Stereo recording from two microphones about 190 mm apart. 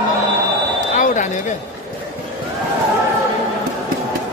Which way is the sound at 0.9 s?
40° left (ahead or behind).